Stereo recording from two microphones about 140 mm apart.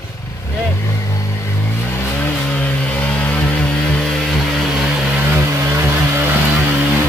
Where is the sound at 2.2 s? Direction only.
10° left (ahead or behind); by 6.0 s 15° right (ahead or behind).